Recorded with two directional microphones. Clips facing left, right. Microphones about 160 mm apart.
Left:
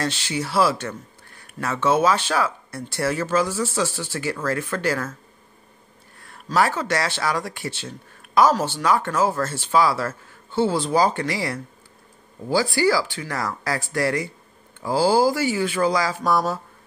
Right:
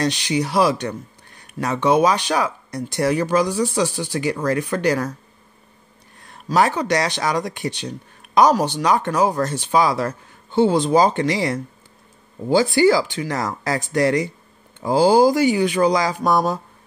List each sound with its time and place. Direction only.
0.0 s speech: 15° right (ahead or behind)
6.1 s speech: 20° right (ahead or behind)